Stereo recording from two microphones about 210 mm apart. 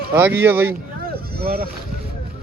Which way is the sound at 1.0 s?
45° right (ahead or behind).